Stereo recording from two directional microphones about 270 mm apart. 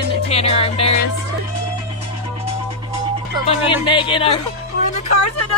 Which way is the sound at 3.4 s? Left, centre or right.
Centre.